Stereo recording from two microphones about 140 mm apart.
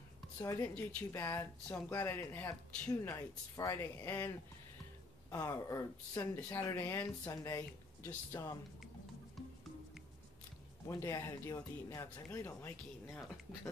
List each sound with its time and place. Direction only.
0.4 s speech: 20° left (ahead or behind)
10.9 s speech: 20° left (ahead or behind)